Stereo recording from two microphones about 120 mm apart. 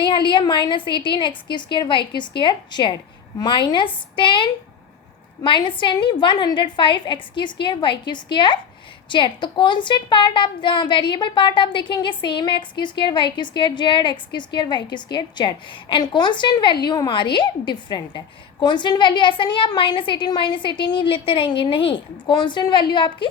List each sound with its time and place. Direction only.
0.0 s a woman's voice: 45° left (ahead or behind)